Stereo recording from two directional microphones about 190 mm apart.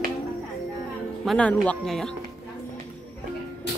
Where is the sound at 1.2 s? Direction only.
5° left (ahead or behind).